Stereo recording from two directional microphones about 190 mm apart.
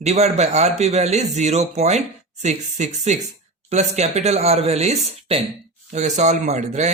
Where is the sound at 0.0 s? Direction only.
35° right (ahead or behind).